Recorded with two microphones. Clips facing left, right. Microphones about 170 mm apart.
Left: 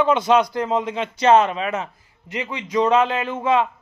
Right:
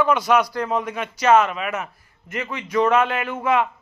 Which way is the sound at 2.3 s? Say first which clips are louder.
Even; 15° left (ahead or behind).